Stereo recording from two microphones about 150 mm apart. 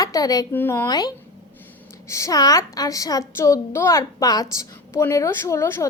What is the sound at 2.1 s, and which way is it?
Speech, 20° left (ahead or behind).